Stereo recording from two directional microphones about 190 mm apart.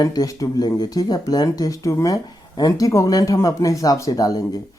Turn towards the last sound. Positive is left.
turn(degrees=20)  # may be behind; listen again after turning